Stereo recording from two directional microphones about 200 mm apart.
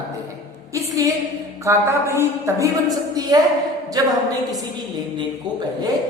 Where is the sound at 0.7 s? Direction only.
15° right (ahead or behind).